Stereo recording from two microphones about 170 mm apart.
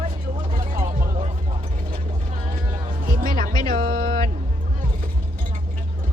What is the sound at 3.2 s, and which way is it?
Music, 55° right (ahead or behind).